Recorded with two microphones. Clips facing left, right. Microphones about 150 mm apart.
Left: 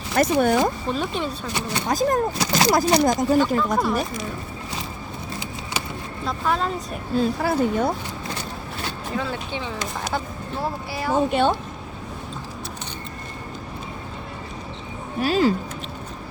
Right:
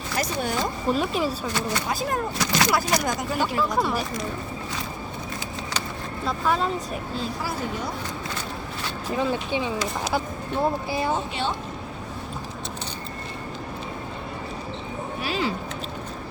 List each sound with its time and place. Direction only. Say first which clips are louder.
0.2 s speech: left 9 dB; 55° left (ahead or behind)
0.9 s speech: right 1 dB; 5° right (ahead or behind)
1.9 s speech: left 6 dB; 40° left (ahead or behind)
3.3 s speech: left 5 dB; 10° right (ahead or behind)
3.8 s speech: left 2 dB; centre (ahead or behind)
6.2 s speech: even; centre (ahead or behind)
7.2 s speech: left 11 dB; 55° left (ahead or behind)
9.1 s speech: right 4 dB; 15° right (ahead or behind)
11.3 s speech: left 8 dB; 50° left (ahead or behind)
15.2 s speech: left 9 dB; 45° left (ahead or behind)